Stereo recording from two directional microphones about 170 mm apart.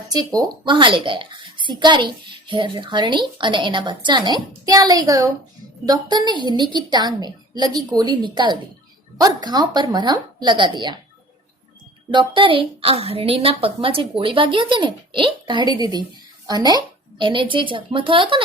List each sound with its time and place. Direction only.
0.1 s a child's voice: 20° right (ahead or behind)
12.1 s a woman's voice: 30° right (ahead or behind)